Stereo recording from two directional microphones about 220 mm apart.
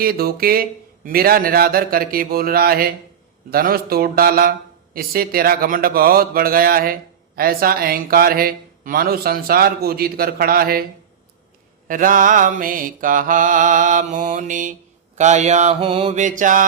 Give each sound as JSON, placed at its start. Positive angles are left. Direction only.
{"t": 0.0, "sound": "a man's voice", "side_deg": -45}
{"t": 11.9, "sound": "a man's voice", "side_deg": -35}